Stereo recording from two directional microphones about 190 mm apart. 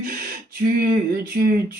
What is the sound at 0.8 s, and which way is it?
Speech, 55° right (ahead or behind).